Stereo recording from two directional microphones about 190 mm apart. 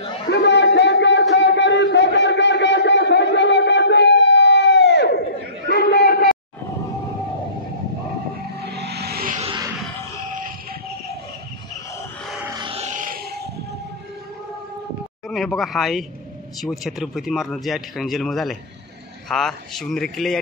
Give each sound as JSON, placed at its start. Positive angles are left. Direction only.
{"t": 0.3, "sound": "a sound", "side_deg": 65}
{"t": 8.6, "sound": "music", "side_deg": -60}
{"t": 12.4, "sound": "music", "side_deg": -25}
{"t": 15.2, "sound": "speech", "side_deg": 0}